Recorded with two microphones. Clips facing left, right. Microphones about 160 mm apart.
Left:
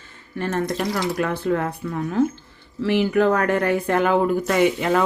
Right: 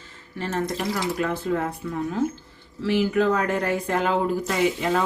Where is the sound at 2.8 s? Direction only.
65° left (ahead or behind).